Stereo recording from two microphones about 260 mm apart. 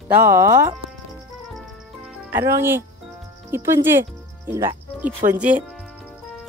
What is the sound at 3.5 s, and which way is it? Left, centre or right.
Speech, centre.